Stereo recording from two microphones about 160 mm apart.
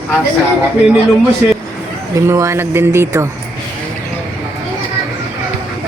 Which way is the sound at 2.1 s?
20° right (ahead or behind).